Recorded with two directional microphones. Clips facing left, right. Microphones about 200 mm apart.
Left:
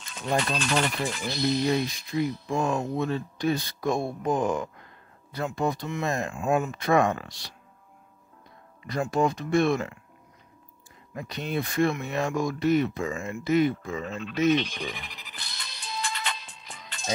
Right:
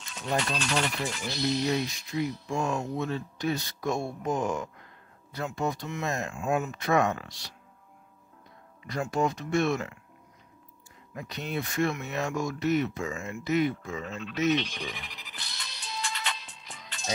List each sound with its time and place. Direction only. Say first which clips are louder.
0.2 s speech: left 3 dB; 50° left (ahead or behind)
3.1 s speech: left 4 dB; 35° left (ahead or behind)
3.9 s speech: left 3 dB; 55° left (ahead or behind)
5.3 s speech: left 3 dB; 35° left (ahead or behind)
8.8 s speech: left 3 dB; 30° left (ahead or behind)
11.1 s speech: left 3 dB; 30° left (ahead or behind)
14.5 s music: left 3 dB; 50° left (ahead or behind)